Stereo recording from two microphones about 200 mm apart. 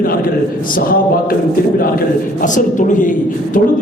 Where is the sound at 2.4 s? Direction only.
40° left (ahead or behind).